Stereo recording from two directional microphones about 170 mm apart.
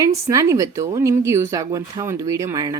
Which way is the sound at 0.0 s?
20° right (ahead or behind).